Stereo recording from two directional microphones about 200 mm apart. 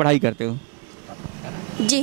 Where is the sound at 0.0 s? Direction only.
15° right (ahead or behind).